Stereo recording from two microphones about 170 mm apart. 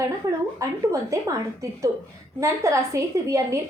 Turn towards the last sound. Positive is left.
turn(degrees=-15)  # may be behind; listen again after turning